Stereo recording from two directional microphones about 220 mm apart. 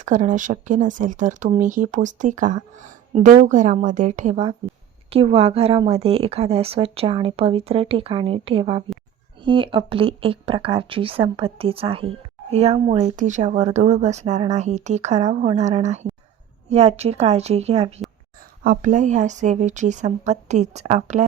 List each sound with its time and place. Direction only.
0.0 s a woman's voice: 35° right (ahead or behind)